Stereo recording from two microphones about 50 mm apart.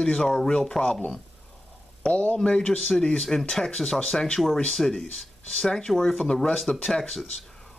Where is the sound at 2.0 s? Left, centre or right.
Left.